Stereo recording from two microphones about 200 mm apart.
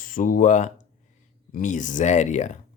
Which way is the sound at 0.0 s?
45° left (ahead or behind).